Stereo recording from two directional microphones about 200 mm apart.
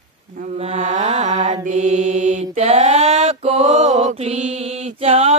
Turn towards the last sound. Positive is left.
turn(degrees=-30)  # may be behind; listen again after turning